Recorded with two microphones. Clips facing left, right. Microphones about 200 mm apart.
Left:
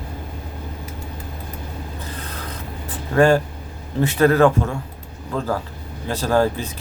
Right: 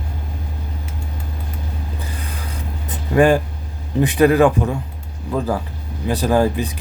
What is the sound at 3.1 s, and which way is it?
Speech, 15° right (ahead or behind).